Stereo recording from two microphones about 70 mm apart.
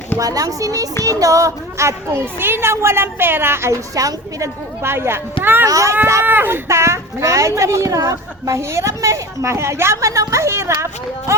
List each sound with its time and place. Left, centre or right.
0.2 s a child's voice: right
3.9 s a child's voice: right
4.8 s a woman's voice: right
5.6 s a woman's voice: right
6.2 s speech: right
6.7 s a woman's voice: right